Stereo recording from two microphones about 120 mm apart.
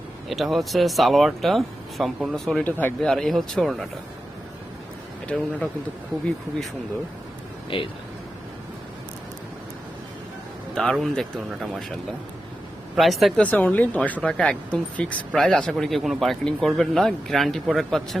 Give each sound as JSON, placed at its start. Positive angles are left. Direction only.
{"t": 0.3, "sound": "speech", "side_deg": 0}
{"t": 2.6, "sound": "speech", "side_deg": 15}
{"t": 5.3, "sound": "speech", "side_deg": 5}
{"t": 7.7, "sound": "speech", "side_deg": 45}
{"t": 10.8, "sound": "speech", "side_deg": 0}
{"t": 13.0, "sound": "speech", "side_deg": 0}
{"t": 13.4, "sound": "speech", "side_deg": 10}